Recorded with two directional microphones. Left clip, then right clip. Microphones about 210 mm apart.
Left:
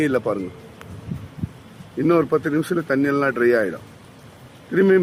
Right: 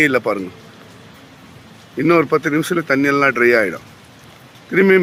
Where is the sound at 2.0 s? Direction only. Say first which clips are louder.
Right 4 dB; 15° right (ahead or behind).